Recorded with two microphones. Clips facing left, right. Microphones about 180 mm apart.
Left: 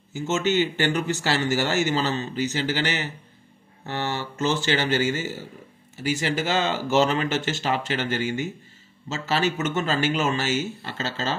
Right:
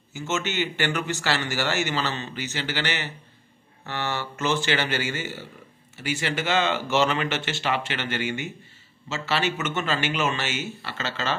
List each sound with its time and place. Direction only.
0.1 s a man's voice: 40° left (ahead or behind)
3.8 s mantra: 15° left (ahead or behind)
4.7 s a man's voice: 45° left (ahead or behind)